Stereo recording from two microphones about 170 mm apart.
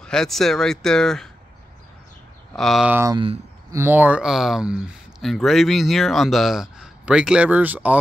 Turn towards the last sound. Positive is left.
turn(degrees=-10)  # may be behind; listen again after turning